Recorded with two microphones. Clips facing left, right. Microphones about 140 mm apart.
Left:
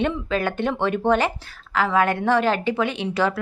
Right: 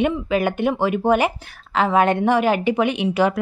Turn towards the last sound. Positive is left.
turn(degrees=-15)  # may be behind; listen again after turning